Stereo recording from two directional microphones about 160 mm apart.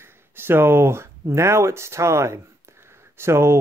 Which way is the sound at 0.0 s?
15° right (ahead or behind).